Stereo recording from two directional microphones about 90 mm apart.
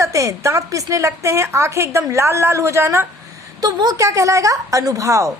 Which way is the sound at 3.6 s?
45° right (ahead or behind).